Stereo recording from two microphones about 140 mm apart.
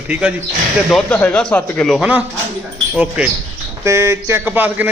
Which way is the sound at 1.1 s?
10° left (ahead or behind).